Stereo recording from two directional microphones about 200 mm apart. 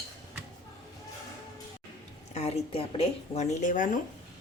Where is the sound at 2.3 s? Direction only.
30° left (ahead or behind).